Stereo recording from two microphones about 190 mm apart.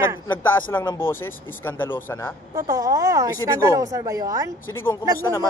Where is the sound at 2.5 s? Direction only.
20° right (ahead or behind).